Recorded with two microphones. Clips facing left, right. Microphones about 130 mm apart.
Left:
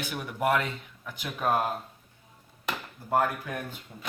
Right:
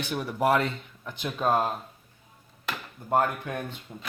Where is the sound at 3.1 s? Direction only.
20° right (ahead or behind).